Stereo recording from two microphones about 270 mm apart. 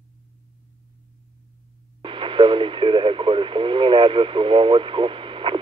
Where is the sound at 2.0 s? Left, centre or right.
Centre.